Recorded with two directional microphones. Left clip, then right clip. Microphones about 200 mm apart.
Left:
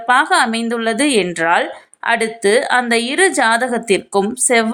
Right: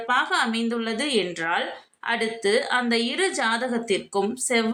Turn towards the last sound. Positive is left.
turn(degrees=40)  # may be behind; listen again after turning